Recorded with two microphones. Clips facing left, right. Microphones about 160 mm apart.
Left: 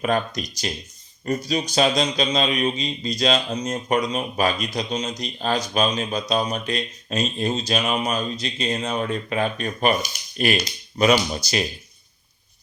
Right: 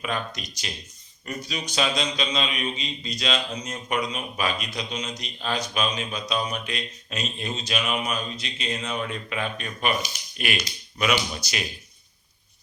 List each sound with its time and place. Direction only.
0.0 s speech: 40° left (ahead or behind)